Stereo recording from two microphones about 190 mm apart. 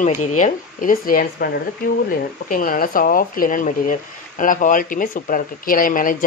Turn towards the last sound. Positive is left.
turn(degrees=45)  # may be behind; listen again after turning